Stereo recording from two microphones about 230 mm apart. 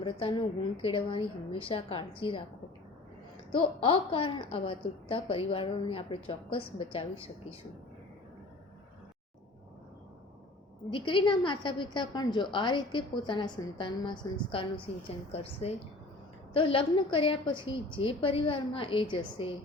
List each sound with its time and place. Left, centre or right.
0.0 s a woman's voice: left
3.5 s a woman's voice: left
10.8 s a woman's voice: left